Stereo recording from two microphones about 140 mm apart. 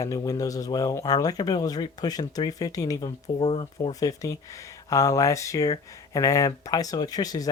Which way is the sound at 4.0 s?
25° left (ahead or behind).